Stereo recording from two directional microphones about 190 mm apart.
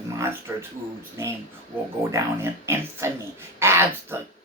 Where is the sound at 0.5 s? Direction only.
15° right (ahead or behind).